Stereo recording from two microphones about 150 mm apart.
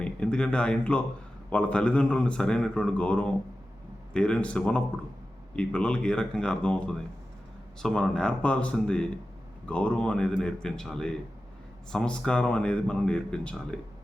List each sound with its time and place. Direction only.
0.0 s a man's voice: 5° left (ahead or behind)